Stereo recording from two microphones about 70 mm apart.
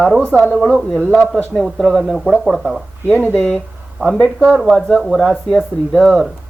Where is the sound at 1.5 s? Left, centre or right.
Centre.